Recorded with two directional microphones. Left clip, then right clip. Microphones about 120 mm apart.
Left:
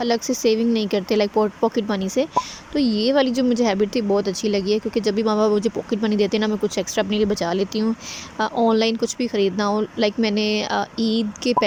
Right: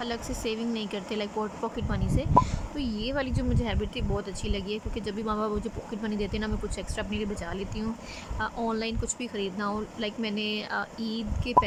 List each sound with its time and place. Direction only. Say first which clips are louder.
0.0 s speech: left 13 dB; 60° left (ahead or behind)